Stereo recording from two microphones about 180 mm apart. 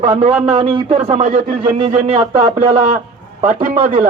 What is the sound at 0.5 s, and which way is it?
A man's voice, 30° right (ahead or behind).